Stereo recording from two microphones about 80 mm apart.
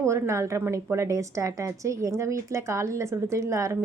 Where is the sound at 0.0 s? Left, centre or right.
Right.